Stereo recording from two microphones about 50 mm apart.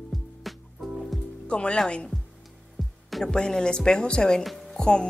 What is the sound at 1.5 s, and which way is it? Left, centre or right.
Speech, left.